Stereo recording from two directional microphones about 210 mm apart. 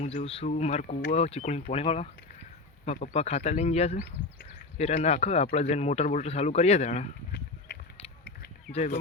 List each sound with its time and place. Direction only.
0.0 s speech: 30° left (ahead or behind)
8.7 s speech: 30° left (ahead or behind)